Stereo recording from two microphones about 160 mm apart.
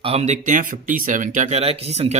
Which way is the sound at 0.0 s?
40° right (ahead or behind).